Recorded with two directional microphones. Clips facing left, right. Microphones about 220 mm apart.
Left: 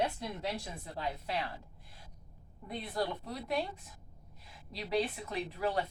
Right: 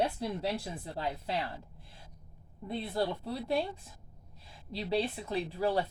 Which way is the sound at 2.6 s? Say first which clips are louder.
Right 3 dB; 30° right (ahead or behind).